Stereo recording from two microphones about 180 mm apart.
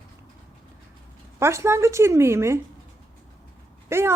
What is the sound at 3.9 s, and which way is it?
Speech, 15° right (ahead or behind).